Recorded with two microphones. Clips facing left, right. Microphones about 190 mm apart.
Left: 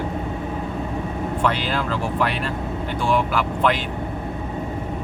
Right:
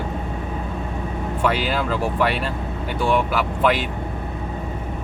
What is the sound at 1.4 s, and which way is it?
Speech, 5° right (ahead or behind).